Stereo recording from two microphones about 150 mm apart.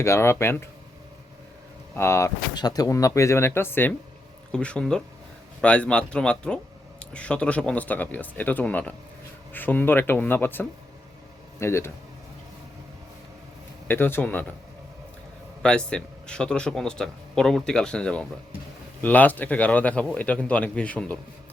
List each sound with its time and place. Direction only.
0.0 s speech: 20° left (ahead or behind)
2.0 s a man's voice: 15° left (ahead or behind)
13.8 s speech: 15° left (ahead or behind)
15.6 s a man's voice: 5° left (ahead or behind)